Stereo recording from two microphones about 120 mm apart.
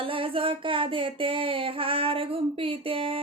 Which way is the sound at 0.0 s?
50° right (ahead or behind).